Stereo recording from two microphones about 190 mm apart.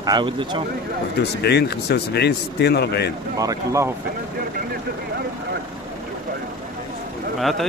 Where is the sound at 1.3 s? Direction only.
60° left (ahead or behind).